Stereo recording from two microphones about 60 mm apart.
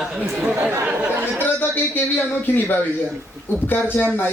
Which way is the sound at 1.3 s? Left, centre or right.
Left.